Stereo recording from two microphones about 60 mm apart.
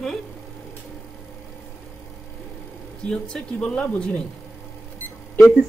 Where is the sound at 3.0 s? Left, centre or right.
Centre.